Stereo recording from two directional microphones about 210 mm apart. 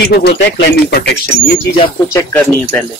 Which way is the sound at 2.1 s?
10° left (ahead or behind).